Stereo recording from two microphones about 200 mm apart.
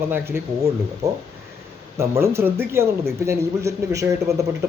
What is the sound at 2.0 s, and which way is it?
Speech, 15° right (ahead or behind).